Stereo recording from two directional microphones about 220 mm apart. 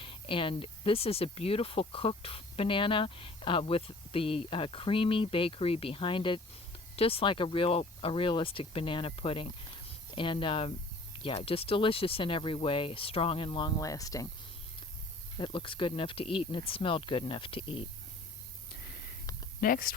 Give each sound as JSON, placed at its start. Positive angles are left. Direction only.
{"t": 0.0, "sound": "speech", "side_deg": 25}
{"t": 15.4, "sound": "speech", "side_deg": 25}
{"t": 19.6, "sound": "speech", "side_deg": 40}